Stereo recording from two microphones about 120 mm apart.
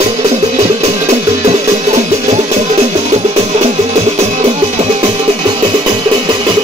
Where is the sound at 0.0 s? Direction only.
65° right (ahead or behind).